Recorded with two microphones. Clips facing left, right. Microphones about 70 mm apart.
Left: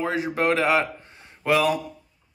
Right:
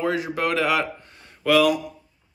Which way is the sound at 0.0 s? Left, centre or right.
Left.